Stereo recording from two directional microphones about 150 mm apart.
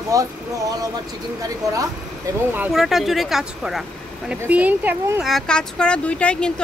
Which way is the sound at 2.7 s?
Centre (ahead or behind).